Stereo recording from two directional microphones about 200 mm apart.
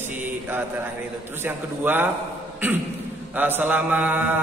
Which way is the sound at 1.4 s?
10° right (ahead or behind).